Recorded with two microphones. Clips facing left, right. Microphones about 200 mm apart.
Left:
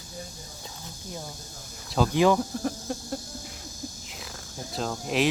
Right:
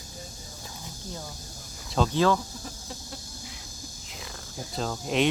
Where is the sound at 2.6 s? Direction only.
55° left (ahead or behind).